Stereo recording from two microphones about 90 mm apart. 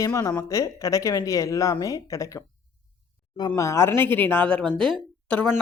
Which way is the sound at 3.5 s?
30° left (ahead or behind).